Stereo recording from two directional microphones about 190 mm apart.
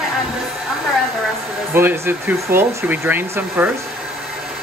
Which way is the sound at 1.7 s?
10° right (ahead or behind).